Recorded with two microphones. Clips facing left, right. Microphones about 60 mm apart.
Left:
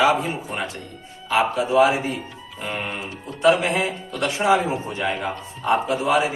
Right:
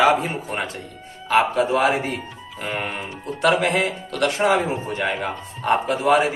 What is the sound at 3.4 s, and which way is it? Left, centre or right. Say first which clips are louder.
A man's voice: left 1 dB; right.